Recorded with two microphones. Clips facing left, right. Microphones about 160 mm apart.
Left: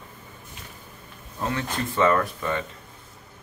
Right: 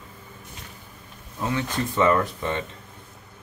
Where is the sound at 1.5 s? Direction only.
20° right (ahead or behind).